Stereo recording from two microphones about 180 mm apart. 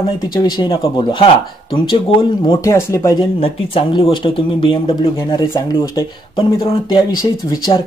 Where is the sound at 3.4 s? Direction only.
30° left (ahead or behind).